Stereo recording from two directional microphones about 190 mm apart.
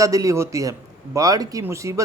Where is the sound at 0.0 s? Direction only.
15° right (ahead or behind).